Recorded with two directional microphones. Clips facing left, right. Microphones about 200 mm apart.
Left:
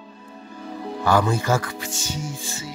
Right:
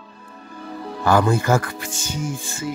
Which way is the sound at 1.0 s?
50° right (ahead or behind).